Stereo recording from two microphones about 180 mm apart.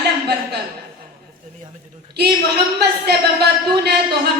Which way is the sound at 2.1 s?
65° right (ahead or behind).